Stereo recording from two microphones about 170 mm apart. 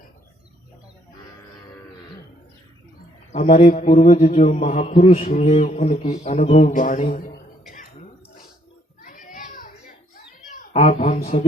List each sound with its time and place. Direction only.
3.3 s mantra: 45° left (ahead or behind)
9.0 s children playing: 55° left (ahead or behind)
10.7 s a sound: 35° left (ahead or behind)